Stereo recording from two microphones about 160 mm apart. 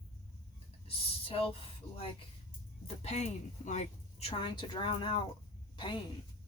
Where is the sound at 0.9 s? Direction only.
35° left (ahead or behind).